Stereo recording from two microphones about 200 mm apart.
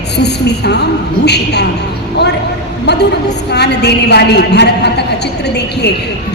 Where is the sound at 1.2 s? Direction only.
55° left (ahead or behind).